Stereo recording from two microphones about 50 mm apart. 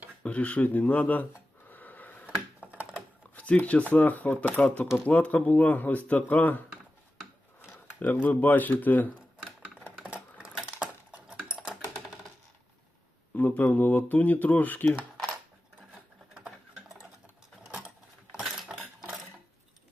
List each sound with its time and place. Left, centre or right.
0.2 s speech: left
1.7 s a sound: left
2.2 s computer keyboard: right
3.3 s speech: left
7.9 s speech: left
10.6 s cutlery: right
11.4 s typing: centre
13.3 s speech: left
15.9 s sewing machine: centre
17.7 s mechanisms: centre